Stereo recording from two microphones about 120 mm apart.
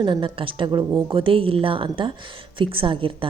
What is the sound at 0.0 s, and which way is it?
A woman's voice, 45° right (ahead or behind).